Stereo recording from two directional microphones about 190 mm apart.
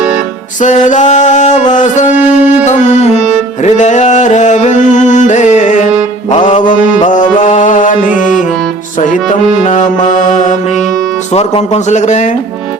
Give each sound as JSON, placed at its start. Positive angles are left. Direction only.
{"t": 0.6, "sound": "music", "side_deg": 40}
{"t": 2.1, "sound": "music", "side_deg": -10}
{"t": 2.6, "sound": "music", "side_deg": 40}
{"t": 9.6, "sound": "music", "side_deg": 40}
{"t": 11.3, "sound": "speech", "side_deg": 35}